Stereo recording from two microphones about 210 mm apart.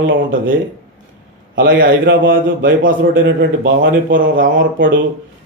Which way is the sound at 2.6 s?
60° right (ahead or behind).